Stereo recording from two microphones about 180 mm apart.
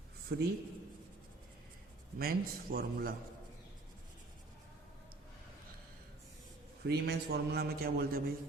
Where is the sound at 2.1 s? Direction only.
55° right (ahead or behind).